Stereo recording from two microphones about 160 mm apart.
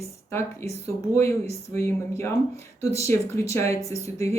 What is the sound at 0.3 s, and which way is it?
Speech, 15° left (ahead or behind).